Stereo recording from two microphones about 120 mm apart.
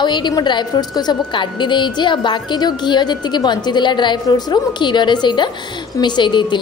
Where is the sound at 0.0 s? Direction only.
40° left (ahead or behind).